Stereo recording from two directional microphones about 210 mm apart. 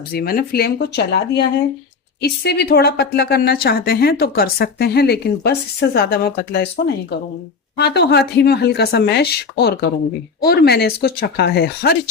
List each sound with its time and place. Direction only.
0.1 s a woman's voice: 45° left (ahead or behind)